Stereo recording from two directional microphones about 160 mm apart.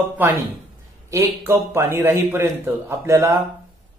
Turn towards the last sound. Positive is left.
turn(degrees=-15)  # may be behind; listen again after turning